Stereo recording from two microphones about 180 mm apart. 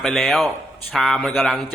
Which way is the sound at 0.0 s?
Centre (ahead or behind).